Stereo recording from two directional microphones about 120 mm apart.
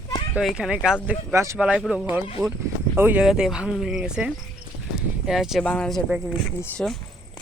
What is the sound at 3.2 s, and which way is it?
Speech, 5° right (ahead or behind).